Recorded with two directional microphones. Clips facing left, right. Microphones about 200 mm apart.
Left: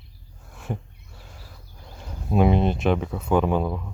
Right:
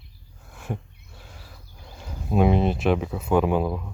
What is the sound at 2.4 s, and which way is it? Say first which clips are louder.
Speech: even; centre (ahead or behind).